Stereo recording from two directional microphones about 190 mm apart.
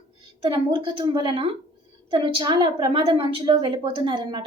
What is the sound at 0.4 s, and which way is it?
A woman's voice, 25° right (ahead or behind).